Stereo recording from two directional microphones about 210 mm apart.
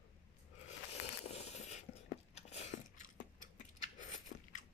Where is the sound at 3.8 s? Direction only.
35° left (ahead or behind).